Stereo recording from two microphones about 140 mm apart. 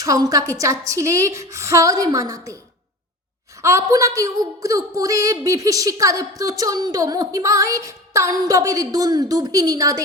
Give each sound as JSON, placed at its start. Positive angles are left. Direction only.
{"t": 0.0, "sound": "a woman's voice", "side_deg": -25}
{"t": 3.6, "sound": "a woman's voice", "side_deg": -20}